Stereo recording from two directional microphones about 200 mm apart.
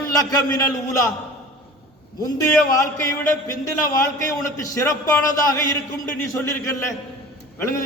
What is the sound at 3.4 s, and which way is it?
A man's voice, 15° left (ahead or behind).